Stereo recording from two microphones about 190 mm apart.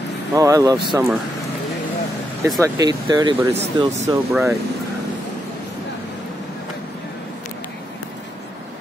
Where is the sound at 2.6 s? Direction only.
20° right (ahead or behind).